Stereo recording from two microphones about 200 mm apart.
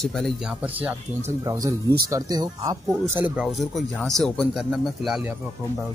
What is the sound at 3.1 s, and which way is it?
Speech, 5° right (ahead or behind).